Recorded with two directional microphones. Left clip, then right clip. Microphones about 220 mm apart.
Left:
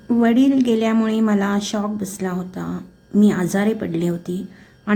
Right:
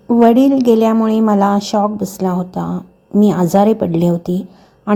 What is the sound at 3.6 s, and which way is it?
Speech, 20° right (ahead or behind).